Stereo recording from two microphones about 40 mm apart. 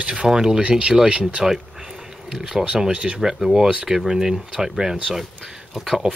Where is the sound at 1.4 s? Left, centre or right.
Centre.